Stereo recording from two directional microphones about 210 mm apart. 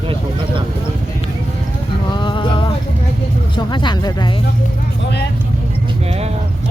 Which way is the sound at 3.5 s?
20° left (ahead or behind).